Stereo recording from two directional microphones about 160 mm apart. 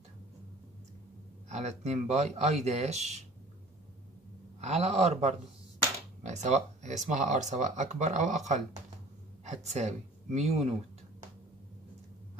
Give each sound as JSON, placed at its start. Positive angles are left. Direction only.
{"t": 1.5, "sound": "speech", "side_deg": -45}
{"t": 4.6, "sound": "speech", "side_deg": -45}